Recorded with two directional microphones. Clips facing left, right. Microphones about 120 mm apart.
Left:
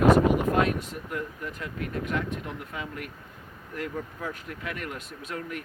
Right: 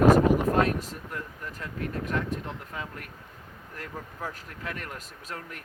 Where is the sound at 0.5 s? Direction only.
35° right (ahead or behind).